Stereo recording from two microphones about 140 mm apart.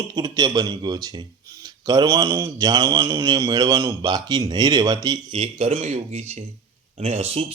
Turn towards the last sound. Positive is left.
turn(degrees=-50)  # may be behind; listen again after turning